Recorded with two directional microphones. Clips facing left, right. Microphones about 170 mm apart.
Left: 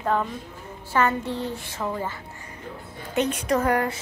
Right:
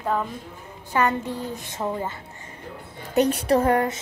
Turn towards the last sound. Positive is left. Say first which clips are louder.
# right 3 dB
turn(degrees=-25)  # may be behind; listen again after turning